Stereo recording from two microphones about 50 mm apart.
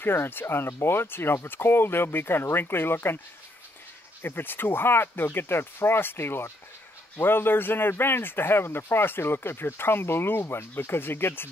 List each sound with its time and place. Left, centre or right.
0.0 s speech: left
4.2 s speech: left